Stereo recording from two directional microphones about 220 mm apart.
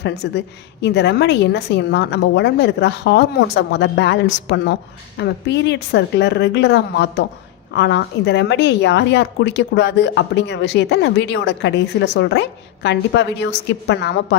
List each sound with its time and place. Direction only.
0.0 s a woman's voice: 50° left (ahead or behind)